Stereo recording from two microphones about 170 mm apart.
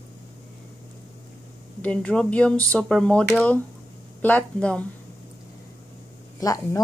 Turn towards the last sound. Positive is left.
turn(degrees=20)  # may be behind; listen again after turning